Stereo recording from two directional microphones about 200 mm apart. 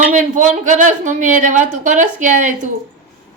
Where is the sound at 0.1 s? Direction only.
40° right (ahead or behind).